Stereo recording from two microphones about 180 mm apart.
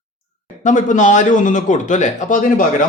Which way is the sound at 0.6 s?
45° left (ahead or behind).